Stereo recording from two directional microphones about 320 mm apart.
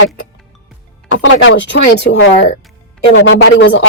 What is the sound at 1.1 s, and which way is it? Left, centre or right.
Speech, left.